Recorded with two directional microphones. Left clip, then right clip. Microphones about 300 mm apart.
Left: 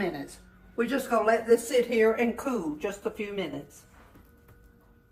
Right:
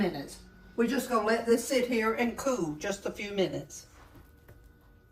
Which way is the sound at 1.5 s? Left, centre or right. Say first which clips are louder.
Left 4 dB; left.